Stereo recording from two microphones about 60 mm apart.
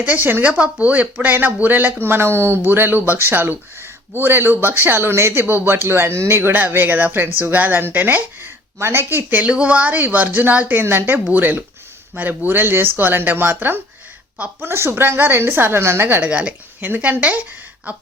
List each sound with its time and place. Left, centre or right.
0.2 s speech: right
0.4 s speech: right
9.4 s a woman's voice: centre
14.6 s speech: right
16.0 s speech: right
16.3 s a woman's voice: right